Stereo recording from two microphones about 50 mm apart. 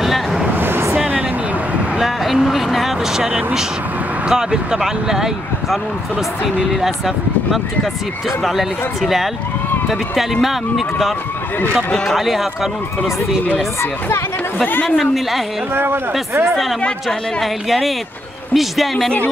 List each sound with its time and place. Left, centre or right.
0.0 s vehicle: centre
0.6 s vehicle: right
0.9 s a sound: right
2.0 s vehicle: centre
4.3 s speech: centre
8.5 s speech: centre
15.0 s speech: centre
15.7 s speech: right
16.4 s speech: centre